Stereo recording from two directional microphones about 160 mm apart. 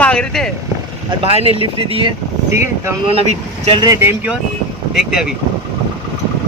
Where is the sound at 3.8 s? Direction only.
15° right (ahead or behind).